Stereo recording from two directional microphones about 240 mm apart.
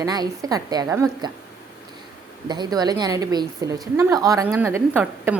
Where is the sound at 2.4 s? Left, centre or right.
Centre.